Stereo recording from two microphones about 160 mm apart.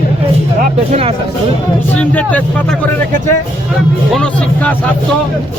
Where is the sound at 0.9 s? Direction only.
40° right (ahead or behind).